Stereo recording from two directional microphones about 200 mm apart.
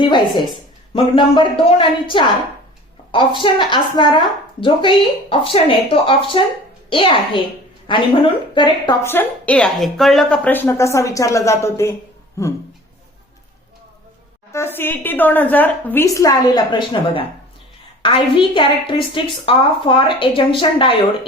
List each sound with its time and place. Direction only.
0.0 s a woman's voice: 25° left (ahead or behind)
14.5 s a woman's voice: 10° left (ahead or behind)